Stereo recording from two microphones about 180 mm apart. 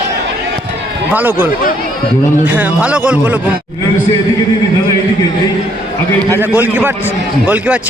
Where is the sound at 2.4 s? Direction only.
10° right (ahead or behind).